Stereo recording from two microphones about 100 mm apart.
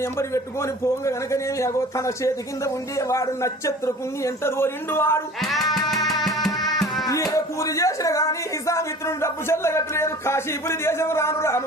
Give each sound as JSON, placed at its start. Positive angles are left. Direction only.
{"t": 0.0, "sound": "a man's voice", "side_deg": 30}
{"t": 5.4, "sound": "music", "side_deg": 0}
{"t": 7.0, "sound": "a man's voice", "side_deg": 35}